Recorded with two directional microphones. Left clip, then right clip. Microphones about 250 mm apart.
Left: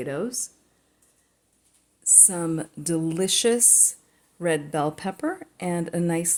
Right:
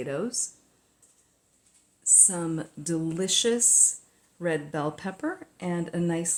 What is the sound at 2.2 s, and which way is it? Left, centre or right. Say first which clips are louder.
Speech: left 3 dB; centre.